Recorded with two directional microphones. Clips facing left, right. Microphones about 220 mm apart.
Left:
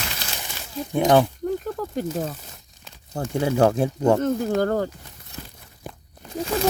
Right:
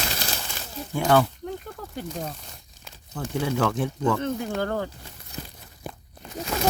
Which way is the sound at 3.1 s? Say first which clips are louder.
Left 5 dB; 40° left (ahead or behind).